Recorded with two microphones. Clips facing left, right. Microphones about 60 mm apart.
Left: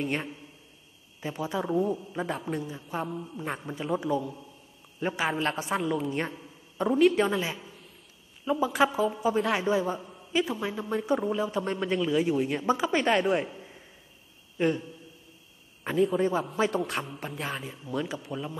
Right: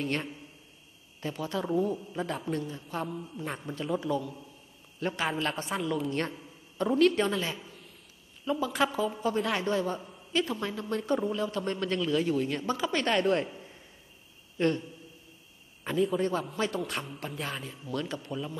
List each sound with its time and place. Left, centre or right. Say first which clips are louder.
0.0 s a man's voice: left 1 dB; centre
5.9 s a man's voice: left 1 dB; centre
16.0 s a man's voice: left 3 dB; centre
17.6 s a man's voice: left 2 dB; centre